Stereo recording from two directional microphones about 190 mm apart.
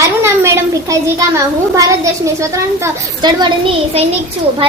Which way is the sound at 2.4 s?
20° right (ahead or behind).